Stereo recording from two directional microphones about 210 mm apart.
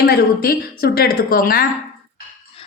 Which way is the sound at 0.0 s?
50° left (ahead or behind).